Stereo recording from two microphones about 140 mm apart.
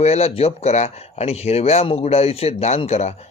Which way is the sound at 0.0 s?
50° left (ahead or behind).